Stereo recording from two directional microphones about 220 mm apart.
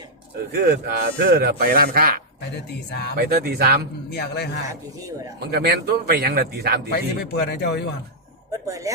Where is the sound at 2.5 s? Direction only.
50° left (ahead or behind).